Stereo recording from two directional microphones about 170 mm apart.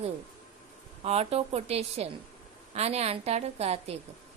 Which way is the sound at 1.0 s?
40° right (ahead or behind).